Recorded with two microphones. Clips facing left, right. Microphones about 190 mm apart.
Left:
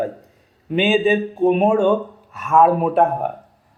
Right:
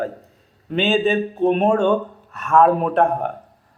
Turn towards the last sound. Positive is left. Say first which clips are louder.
# left 1 dB
turn(degrees=5)  # may be behind; listen again after turning